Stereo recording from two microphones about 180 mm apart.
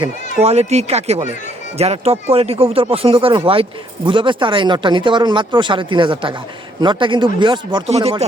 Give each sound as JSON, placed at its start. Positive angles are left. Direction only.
{"t": 0.4, "sound": "speech", "side_deg": -35}